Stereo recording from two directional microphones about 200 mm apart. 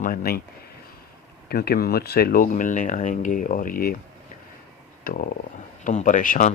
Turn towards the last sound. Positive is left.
turn(degrees=40)  # may be behind; listen again after turning